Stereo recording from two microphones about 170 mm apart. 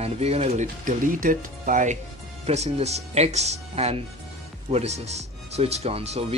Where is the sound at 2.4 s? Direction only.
40° right (ahead or behind).